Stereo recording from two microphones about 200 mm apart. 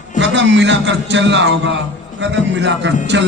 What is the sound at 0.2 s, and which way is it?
A man's voice, 65° right (ahead or behind).